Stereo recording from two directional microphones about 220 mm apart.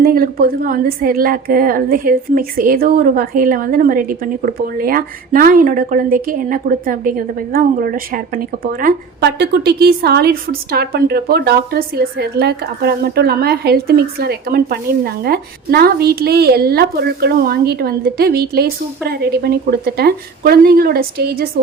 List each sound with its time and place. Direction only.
0.0 s a woman's voice: 40° right (ahead or behind)